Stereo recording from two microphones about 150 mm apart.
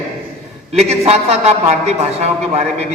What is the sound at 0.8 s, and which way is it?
A man's voice, 45° right (ahead or behind).